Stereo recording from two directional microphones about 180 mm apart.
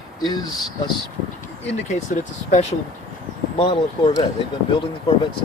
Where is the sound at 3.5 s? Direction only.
30° left (ahead or behind).